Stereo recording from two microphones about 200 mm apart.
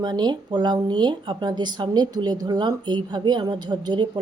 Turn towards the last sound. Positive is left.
turn(degrees=-20)  # may be behind; listen again after turning